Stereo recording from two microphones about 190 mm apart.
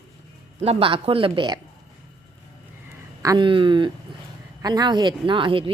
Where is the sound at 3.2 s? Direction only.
25° right (ahead or behind).